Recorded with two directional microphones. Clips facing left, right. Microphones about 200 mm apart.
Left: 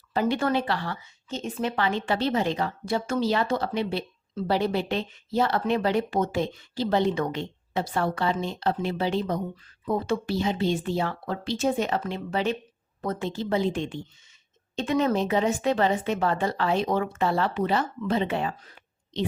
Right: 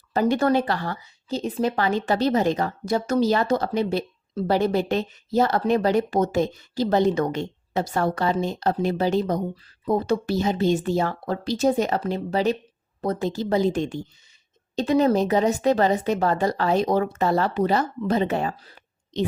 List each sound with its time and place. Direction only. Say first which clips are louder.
0.1 s speech: right 4 dB; 45° right (ahead or behind)